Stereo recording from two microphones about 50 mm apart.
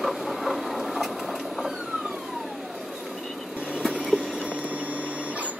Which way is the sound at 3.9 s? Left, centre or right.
Right.